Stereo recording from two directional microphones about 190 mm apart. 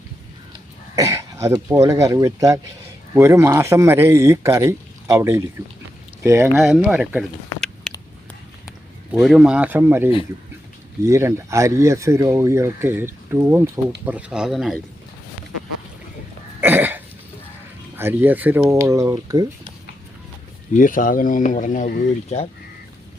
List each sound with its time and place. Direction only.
0.9 s throat clearing: 15° right (ahead or behind)
1.7 s speech: 15° right (ahead or behind); by 7.9 s centre (ahead or behind)
9.1 s speech: centre (ahead or behind)
16.6 s cough: 10° right (ahead or behind)
17.9 s speech: 10° right (ahead or behind)
20.7 s speech: 45° left (ahead or behind)